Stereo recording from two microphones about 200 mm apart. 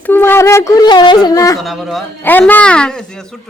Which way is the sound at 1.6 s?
Centre (ahead or behind).